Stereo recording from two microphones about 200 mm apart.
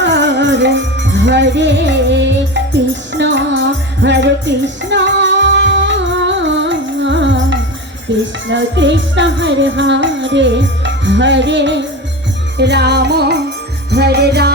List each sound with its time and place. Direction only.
0.0 s music: 60° right (ahead or behind)